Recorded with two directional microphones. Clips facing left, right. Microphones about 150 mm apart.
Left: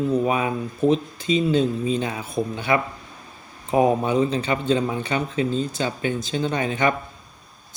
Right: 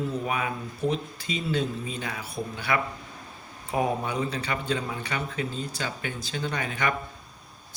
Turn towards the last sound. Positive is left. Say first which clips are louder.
# left 7 dB
turn(degrees=25)  # may be behind; listen again after turning